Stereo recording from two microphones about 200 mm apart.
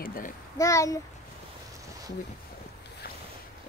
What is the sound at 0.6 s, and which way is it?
Speech, 15° left (ahead or behind).